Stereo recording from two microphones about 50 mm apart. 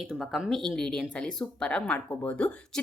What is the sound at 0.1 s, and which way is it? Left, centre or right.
Speech, centre.